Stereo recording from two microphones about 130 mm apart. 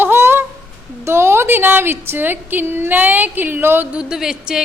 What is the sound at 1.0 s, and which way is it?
A woman's voice, 20° right (ahead or behind).